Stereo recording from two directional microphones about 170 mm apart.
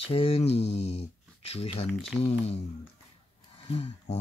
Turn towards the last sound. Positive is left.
turn(degrees=35)  # may be behind; listen again after turning